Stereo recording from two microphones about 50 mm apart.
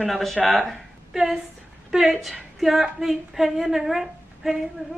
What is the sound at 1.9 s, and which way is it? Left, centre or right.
A woman's voice, centre.